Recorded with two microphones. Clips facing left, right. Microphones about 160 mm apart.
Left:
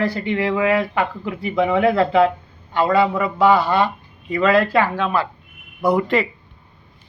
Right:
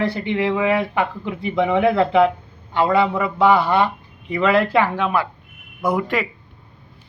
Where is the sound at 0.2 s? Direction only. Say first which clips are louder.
Even; 20° right (ahead or behind).